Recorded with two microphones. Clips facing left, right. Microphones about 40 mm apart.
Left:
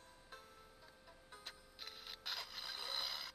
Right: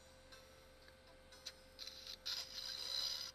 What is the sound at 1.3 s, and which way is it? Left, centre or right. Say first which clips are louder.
Printer: left 3 dB; left.